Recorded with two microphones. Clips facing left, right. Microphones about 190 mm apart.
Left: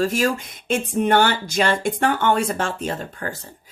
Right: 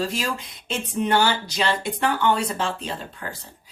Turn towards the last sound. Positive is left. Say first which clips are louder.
# left 5 dB
turn(degrees=50)  # may be behind; listen again after turning